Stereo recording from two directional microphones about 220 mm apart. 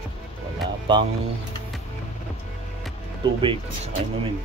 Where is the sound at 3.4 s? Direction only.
25° right (ahead or behind).